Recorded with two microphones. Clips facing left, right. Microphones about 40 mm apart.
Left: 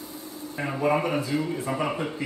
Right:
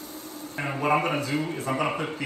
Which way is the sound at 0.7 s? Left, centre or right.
Right.